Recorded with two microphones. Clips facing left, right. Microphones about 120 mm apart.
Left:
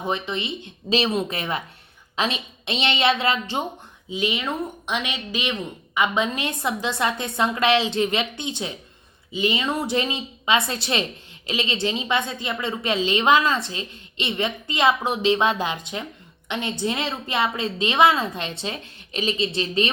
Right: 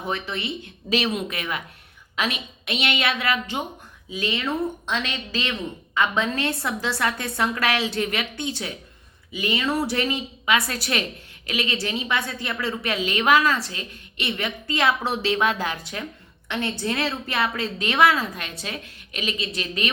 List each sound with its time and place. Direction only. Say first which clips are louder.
0.0 s a woman's voice: left 2 dB; 20° left (ahead or behind)